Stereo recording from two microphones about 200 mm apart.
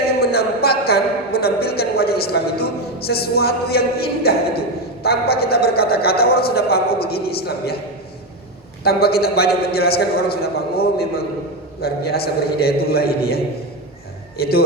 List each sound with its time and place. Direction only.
0.3 s a sound: 50° left (ahead or behind)
5.0 s a man's voice: 50° left (ahead or behind)
8.8 s a man's voice: 50° left (ahead or behind)